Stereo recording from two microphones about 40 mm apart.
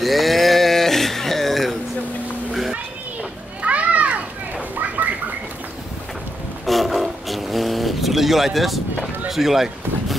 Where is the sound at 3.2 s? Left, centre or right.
Right.